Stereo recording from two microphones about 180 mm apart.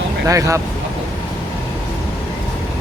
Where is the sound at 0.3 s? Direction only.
15° right (ahead or behind).